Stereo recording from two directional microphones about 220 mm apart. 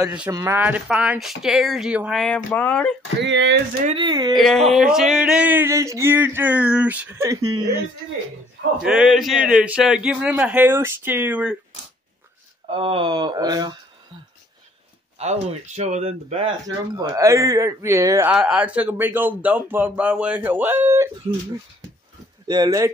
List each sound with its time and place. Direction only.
0.0 s speech: 5° right (ahead or behind)
3.2 s speech: 55° right (ahead or behind)
3.8 s speech: 20° right (ahead or behind)
4.4 s speech: centre (ahead or behind); by 7.8 s 15° right (ahead or behind)
8.8 s speech: centre (ahead or behind)
12.6 s speech: 25° right (ahead or behind)
15.1 s speech: 30° right (ahead or behind); by 21.1 s 10° right (ahead or behind)
22.5 s speech: 15° right (ahead or behind)